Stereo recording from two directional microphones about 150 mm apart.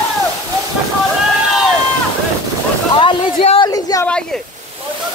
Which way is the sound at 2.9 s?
40° left (ahead or behind).